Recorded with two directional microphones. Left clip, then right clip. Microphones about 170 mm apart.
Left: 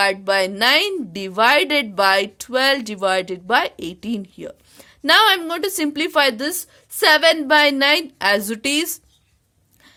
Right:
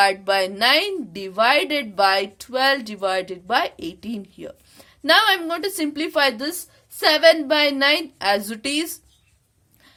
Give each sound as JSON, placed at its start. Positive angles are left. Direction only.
{"t": 0.0, "sound": "a woman's voice", "side_deg": 30}